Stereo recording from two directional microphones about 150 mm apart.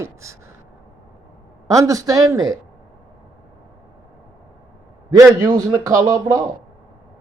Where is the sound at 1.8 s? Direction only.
20° right (ahead or behind).